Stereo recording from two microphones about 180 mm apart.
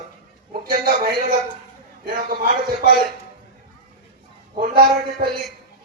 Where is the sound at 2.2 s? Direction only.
50° right (ahead or behind).